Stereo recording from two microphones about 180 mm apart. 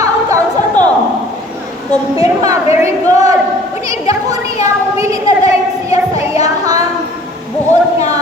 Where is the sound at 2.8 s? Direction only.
20° right (ahead or behind).